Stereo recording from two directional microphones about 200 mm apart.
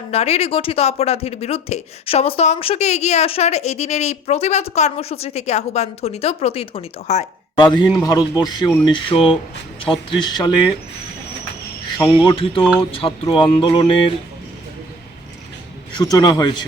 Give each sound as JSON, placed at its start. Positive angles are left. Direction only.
{"t": 0.1, "sound": "speech", "side_deg": 30}
{"t": 11.9, "sound": "speech", "side_deg": 20}
{"t": 16.0, "sound": "speech", "side_deg": 20}